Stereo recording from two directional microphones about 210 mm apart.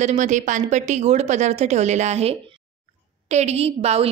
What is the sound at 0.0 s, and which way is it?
A woman's voice, 35° right (ahead or behind).